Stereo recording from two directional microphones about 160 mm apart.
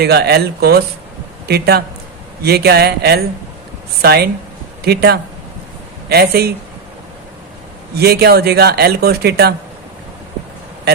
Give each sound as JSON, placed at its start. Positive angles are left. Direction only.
{"t": 0.0, "sound": "speech", "side_deg": -90}
{"t": 7.9, "sound": "speech", "side_deg": -80}